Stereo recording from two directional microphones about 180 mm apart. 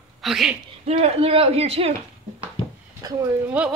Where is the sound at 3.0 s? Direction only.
20° right (ahead or behind).